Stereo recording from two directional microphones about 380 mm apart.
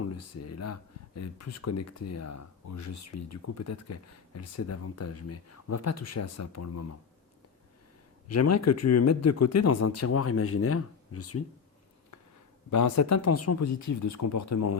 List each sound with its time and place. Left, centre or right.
0.0 s speech: left
8.3 s speech: left
12.7 s speech: left